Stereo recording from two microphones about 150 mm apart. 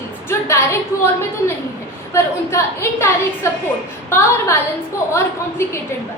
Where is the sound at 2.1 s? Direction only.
15° left (ahead or behind).